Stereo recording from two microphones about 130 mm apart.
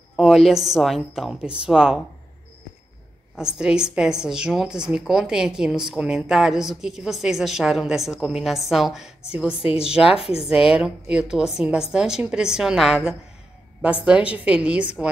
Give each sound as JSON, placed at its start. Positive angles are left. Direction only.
{"t": 0.2, "sound": "a woman's voice", "side_deg": 0}
{"t": 3.3, "sound": "a woman's voice", "side_deg": -5}
{"t": 9.6, "sound": "a woman's voice", "side_deg": 45}
{"t": 9.8, "sound": "a woman's voice", "side_deg": -5}